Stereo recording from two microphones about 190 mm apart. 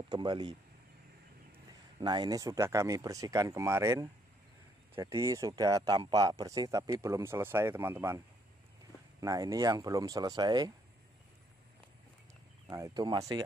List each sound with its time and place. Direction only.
0.1 s speech: 25° right (ahead or behind)
2.0 s speech: 25° right (ahead or behind)
9.2 s speech: 20° right (ahead or behind)
12.6 s speech: 15° right (ahead or behind)